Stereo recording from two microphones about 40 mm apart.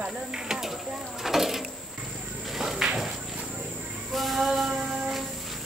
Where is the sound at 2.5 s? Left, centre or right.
Centre.